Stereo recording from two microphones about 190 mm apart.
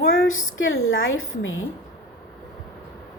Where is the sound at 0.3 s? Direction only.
90° left.